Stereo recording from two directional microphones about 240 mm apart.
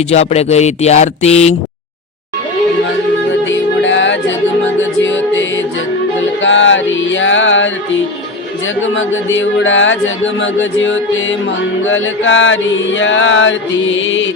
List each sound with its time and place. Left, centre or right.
0.1 s speech: left
3.5 s music: left
9.0 s music: left